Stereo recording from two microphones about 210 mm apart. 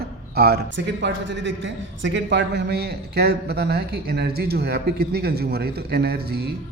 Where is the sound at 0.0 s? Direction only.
50° right (ahead or behind).